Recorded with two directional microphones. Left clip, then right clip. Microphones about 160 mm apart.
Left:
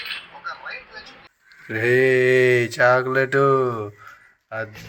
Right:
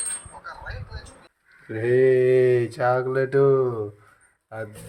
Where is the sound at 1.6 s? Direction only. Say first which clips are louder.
Left 2 dB; centre (ahead or behind).